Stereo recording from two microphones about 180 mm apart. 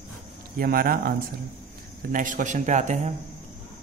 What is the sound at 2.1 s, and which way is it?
Speech, 45° right (ahead or behind).